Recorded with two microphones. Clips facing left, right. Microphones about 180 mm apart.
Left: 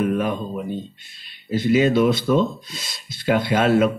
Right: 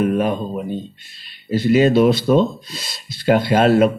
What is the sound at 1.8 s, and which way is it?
Speech, 35° right (ahead or behind).